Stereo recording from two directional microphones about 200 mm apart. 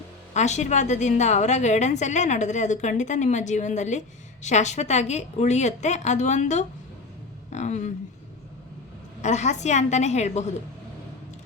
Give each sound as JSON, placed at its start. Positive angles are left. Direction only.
{"t": 0.3, "sound": "a woman's voice", "side_deg": 35}
{"t": 9.2, "sound": "a woman's voice", "side_deg": 35}